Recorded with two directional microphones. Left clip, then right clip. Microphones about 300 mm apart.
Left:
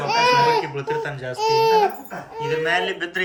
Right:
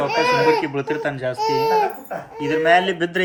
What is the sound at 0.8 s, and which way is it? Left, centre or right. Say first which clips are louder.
Speech: right 2 dB; centre.